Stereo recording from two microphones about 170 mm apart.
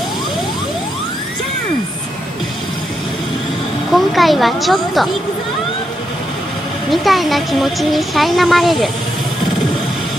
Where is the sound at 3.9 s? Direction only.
Centre (ahead or behind).